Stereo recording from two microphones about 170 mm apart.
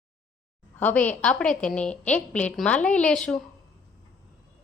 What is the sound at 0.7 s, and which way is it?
A woman's voice, 10° left (ahead or behind).